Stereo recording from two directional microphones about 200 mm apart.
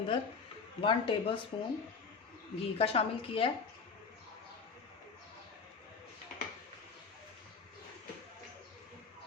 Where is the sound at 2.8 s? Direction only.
30° left (ahead or behind).